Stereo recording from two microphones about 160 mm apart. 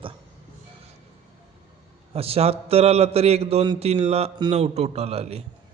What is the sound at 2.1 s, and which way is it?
A man's voice, 40° right (ahead or behind).